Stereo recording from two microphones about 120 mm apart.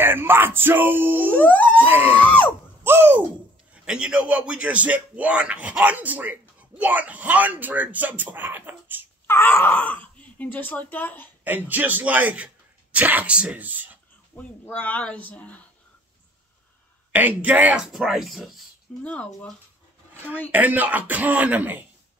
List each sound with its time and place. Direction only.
0.0 s a man's voice: 20° right (ahead or behind)
1.3 s music: 10° left (ahead or behind)
1.9 s a man's voice: 15° right (ahead or behind)
2.1 s screaming: 10° left (ahead or behind)
2.8 s a sound: 20° right (ahead or behind)
3.7 s a man's voice: 5° right (ahead or behind)
9.3 s speech: 15° left (ahead or behind)
11.4 s a man's voice: 15° right (ahead or behind)
14.3 s speech: 10° left (ahead or behind)
17.1 s a man's voice: 15° right (ahead or behind); by 19.5 s 10° left (ahead or behind)
20.5 s a man's voice: 15° right (ahead or behind)